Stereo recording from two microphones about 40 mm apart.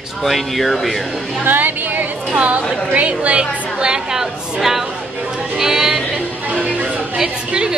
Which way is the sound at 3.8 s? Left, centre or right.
Centre.